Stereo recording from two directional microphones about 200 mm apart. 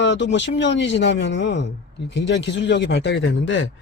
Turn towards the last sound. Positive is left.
turn(degrees=70)  # may be behind; listen again after turning